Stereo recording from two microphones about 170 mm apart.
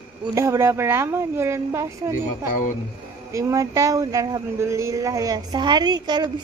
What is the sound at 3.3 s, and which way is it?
Speech, 20° right (ahead or behind).